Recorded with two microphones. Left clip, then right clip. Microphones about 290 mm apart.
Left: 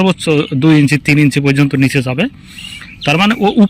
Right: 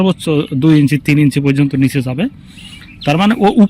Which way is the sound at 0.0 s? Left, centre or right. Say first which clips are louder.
Left 2 dB; centre.